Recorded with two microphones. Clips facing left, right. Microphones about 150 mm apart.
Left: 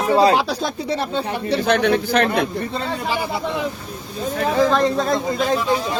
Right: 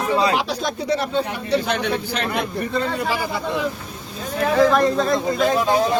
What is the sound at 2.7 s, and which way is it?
Speech, 30° left (ahead or behind).